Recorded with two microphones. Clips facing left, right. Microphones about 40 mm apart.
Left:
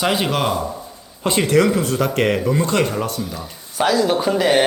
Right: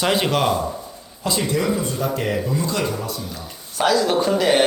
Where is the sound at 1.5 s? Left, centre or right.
Left.